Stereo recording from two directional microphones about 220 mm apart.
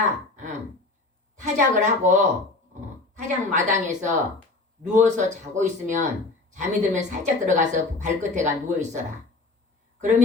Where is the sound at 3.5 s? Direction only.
35° right (ahead or behind).